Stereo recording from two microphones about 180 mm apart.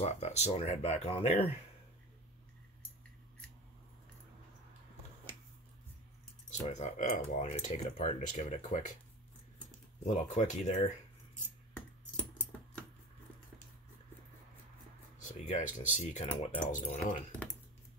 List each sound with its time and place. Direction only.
0.0 s speech: 35° left (ahead or behind)
6.5 s speech: 40° left (ahead or behind)
10.0 s speech: 45° left (ahead or behind)
15.1 s speech: 40° left (ahead or behind)